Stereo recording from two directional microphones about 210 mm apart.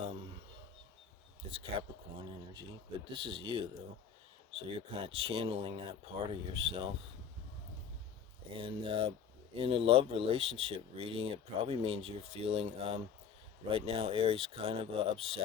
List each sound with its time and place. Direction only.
1.5 s speech: 25° right (ahead or behind)
3.1 s speech: 25° right (ahead or behind)
5.0 s speech: 25° right (ahead or behind)
8.5 s speech: 25° right (ahead or behind)